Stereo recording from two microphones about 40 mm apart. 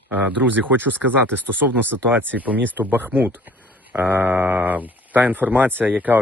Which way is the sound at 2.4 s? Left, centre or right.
Right.